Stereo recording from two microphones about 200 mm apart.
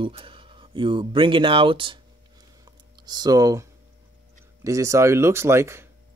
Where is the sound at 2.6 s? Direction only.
20° right (ahead or behind).